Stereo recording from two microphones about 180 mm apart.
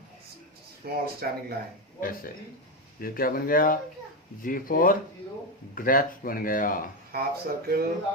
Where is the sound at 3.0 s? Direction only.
55° left (ahead or behind).